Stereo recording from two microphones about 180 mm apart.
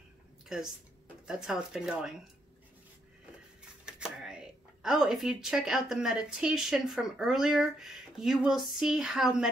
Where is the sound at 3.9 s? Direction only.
5° right (ahead or behind).